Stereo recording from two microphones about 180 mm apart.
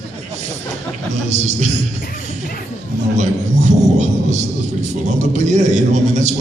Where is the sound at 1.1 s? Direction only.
40° right (ahead or behind).